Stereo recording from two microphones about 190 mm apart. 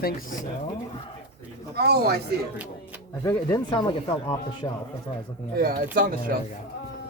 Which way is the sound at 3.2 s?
20° left (ahead or behind).